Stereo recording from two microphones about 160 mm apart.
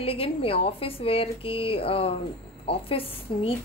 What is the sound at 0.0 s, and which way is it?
A child's voice, 35° left (ahead or behind).